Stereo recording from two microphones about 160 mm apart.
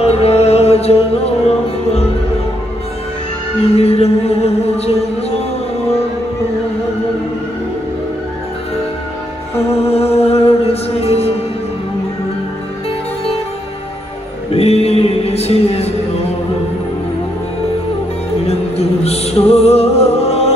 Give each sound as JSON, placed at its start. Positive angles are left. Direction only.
{"t": 0.0, "sound": "music", "side_deg": 40}
{"t": 3.7, "sound": "music", "side_deg": 40}
{"t": 9.8, "sound": "music", "side_deg": 40}
{"t": 14.5, "sound": "music", "side_deg": 40}
{"t": 18.4, "sound": "music", "side_deg": 40}